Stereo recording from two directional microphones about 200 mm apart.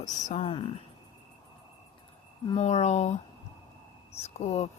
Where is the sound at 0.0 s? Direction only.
35° left (ahead or behind).